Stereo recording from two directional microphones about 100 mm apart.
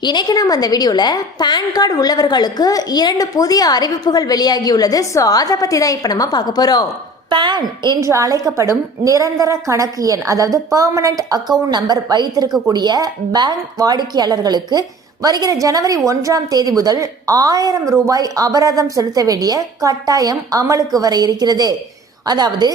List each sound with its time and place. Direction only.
0.0 s a woman's voice: 50° left (ahead or behind)
7.3 s a woman's voice: 50° right (ahead or behind)
8.0 s a woman's voice: 35° right (ahead or behind)